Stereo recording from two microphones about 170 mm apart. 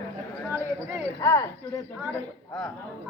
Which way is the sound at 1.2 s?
20° left (ahead or behind).